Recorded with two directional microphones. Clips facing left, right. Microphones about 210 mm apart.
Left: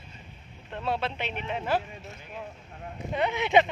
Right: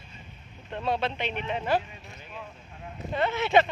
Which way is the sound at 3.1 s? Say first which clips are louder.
Even; 15° left (ahead or behind).